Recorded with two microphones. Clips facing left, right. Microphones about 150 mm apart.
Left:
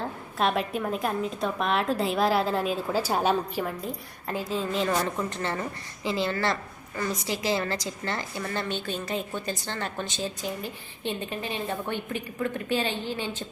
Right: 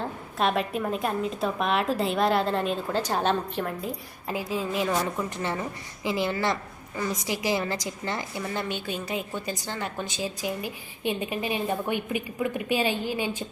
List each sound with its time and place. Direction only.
0.0 s a woman's voice: centre (ahead or behind)